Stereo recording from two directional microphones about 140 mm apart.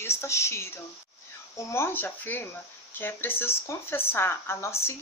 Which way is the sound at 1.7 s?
15° left (ahead or behind).